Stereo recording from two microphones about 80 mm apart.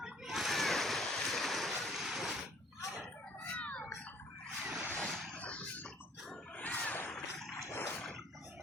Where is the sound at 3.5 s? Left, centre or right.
Centre.